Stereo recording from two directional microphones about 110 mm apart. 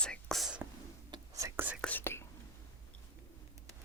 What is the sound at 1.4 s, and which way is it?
Whispering, 30° right (ahead or behind).